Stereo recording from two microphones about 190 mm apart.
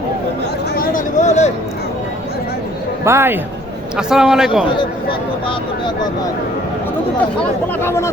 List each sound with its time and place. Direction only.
0.8 s a sound: 40° left (ahead or behind)
3.0 s a man's voice: 15° right (ahead or behind)
3.9 s a man's voice: 5° right (ahead or behind)
5.5 s speech: 25° left (ahead or behind)
7.8 s speech: 15° left (ahead or behind)